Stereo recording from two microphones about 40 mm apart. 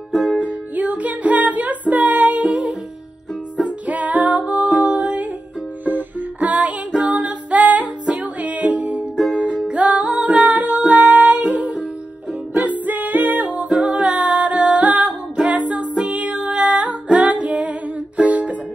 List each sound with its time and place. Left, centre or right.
0.4 s music: right
3.8 s music: right
12.8 s music: right